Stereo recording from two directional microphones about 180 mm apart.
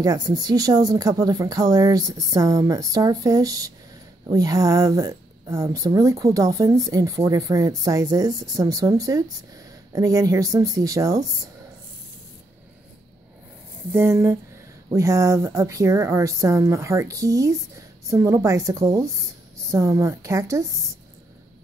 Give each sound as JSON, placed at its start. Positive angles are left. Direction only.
{"t": 0.0, "sound": "speech", "side_deg": -20}
{"t": 13.9, "sound": "a woman's voice", "side_deg": -15}